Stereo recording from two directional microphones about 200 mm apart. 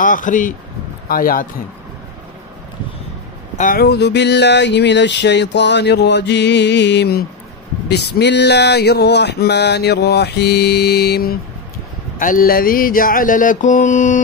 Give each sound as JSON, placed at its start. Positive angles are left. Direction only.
{"t": 0.0, "sound": "speech", "side_deg": 40}
{"t": 1.0, "sound": "mantra", "side_deg": 45}
{"t": 3.5, "sound": "a sound", "side_deg": 45}
{"t": 12.2, "sound": "mantra", "side_deg": 45}